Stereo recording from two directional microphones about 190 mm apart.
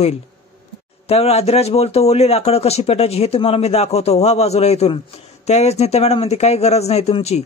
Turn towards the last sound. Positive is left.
turn(degrees=35)  # may be behind; listen again after turning